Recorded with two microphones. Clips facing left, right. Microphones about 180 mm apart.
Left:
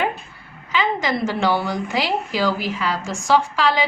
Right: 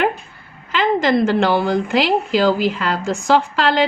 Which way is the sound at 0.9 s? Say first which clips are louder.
Right 7 dB; 55° right (ahead or behind).